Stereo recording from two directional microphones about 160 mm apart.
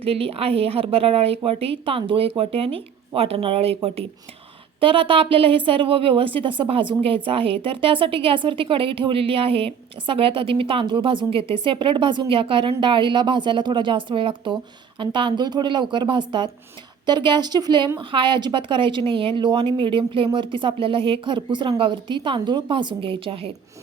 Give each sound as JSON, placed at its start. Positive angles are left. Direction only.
{"t": 0.0, "sound": "a woman's voice", "side_deg": -35}
{"t": 4.8, "sound": "a woman's voice", "side_deg": -35}